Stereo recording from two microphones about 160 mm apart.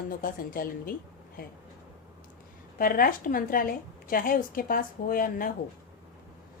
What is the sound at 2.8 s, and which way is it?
A woman's voice, 65° left (ahead or behind).